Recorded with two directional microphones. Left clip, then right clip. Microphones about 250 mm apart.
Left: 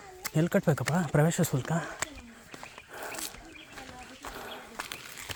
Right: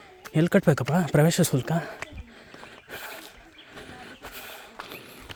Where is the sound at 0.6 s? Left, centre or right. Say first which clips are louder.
Right 6 dB; right.